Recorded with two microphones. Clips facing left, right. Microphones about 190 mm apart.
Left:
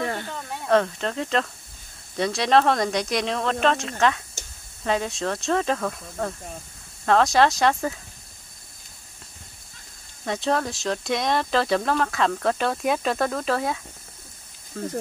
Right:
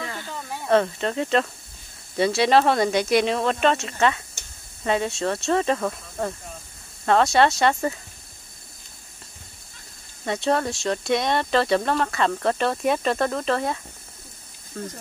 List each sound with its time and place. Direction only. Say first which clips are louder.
0.0 s snake: left 6 dB; 55° left (ahead or behind)
0.3 s speech: right 2 dB; centre (ahead or behind)
10.2 s speech: right 2 dB; centre (ahead or behind)